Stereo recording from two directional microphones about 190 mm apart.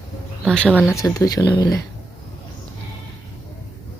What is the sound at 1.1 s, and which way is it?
Speech, 20° left (ahead or behind).